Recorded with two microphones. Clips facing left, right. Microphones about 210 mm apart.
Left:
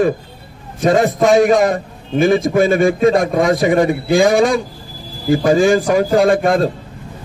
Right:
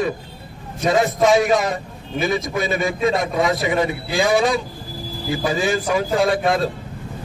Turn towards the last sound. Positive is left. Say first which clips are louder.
# left 6 dB
turn(degrees=50)  # may be behind; listen again after turning